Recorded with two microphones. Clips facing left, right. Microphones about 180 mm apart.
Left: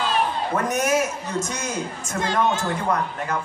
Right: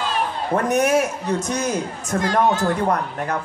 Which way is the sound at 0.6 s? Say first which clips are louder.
Right 5 dB; 60° right (ahead or behind).